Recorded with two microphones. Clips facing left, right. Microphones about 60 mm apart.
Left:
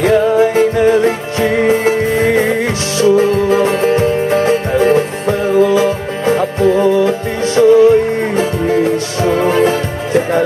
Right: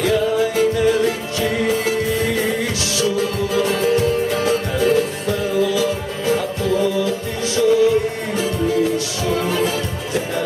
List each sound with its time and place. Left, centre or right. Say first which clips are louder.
0.0 s music: left 7 dB; left